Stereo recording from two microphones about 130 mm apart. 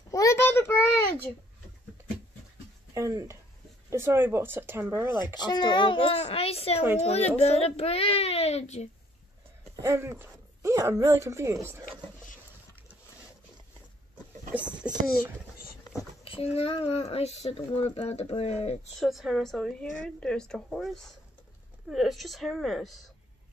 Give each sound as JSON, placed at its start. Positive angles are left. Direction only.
{"t": 0.1, "sound": "a child's voice", "side_deg": 25}
{"t": 2.9, "sound": "speech", "side_deg": -25}
{"t": 5.2, "sound": "a child's voice", "side_deg": 35}
{"t": 6.1, "sound": "speech", "side_deg": 50}
{"t": 9.8, "sound": "speech", "side_deg": -20}
{"t": 14.8, "sound": "speech", "side_deg": -10}
{"t": 16.3, "sound": "speech", "side_deg": 50}
{"t": 18.9, "sound": "a woman's voice", "side_deg": 0}